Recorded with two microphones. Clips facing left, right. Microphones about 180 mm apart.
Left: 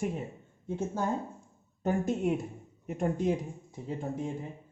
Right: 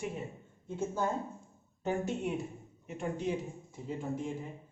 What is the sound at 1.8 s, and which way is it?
Speech, 45° left (ahead or behind).